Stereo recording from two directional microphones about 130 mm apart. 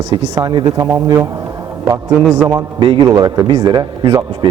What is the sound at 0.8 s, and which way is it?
Speech, 15° right (ahead or behind).